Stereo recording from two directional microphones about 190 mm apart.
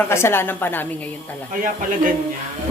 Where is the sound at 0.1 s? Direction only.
15° left (ahead or behind).